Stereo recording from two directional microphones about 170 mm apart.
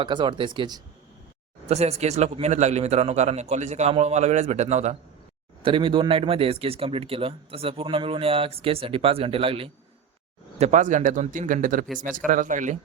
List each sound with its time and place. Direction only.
0.0 s speech: 30° right (ahead or behind)
1.6 s speech: 40° right (ahead or behind)
5.6 s speech: 30° right (ahead or behind)
10.6 s speech: 45° right (ahead or behind)